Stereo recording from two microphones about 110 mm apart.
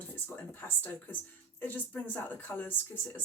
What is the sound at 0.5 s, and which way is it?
Speech, 20° left (ahead or behind).